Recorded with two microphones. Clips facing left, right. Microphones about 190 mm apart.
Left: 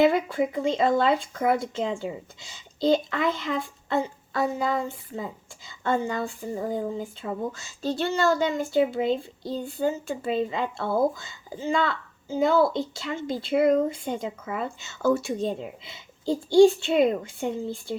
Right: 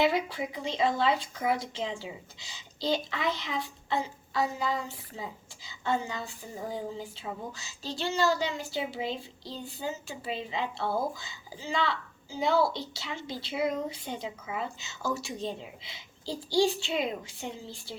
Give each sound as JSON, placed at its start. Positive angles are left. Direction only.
{"t": 0.0, "sound": "speech", "side_deg": 50}